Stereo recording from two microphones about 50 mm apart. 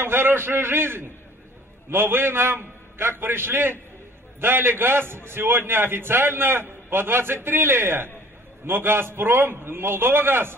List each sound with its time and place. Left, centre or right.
0.0 s a man's voice: right